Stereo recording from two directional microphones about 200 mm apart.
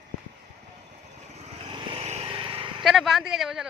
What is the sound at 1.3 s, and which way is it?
Vehicle, 30° right (ahead or behind).